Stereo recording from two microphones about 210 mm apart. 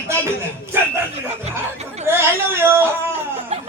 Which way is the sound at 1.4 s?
30° right (ahead or behind).